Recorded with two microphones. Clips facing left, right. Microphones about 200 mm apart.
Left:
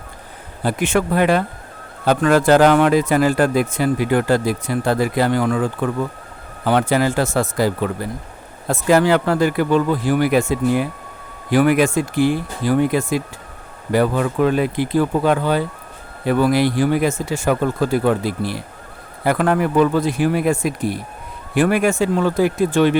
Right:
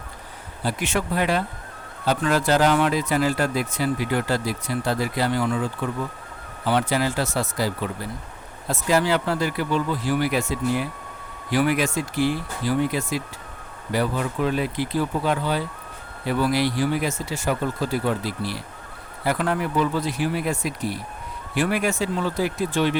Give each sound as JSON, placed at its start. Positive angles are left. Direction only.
{"t": 0.6, "sound": "speech", "side_deg": 50}